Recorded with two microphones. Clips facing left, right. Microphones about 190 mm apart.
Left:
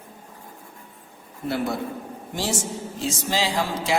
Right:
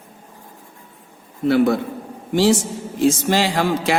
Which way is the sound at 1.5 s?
70° right (ahead or behind).